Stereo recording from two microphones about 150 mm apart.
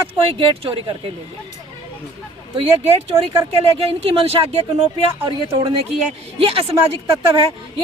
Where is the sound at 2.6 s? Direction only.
40° right (ahead or behind).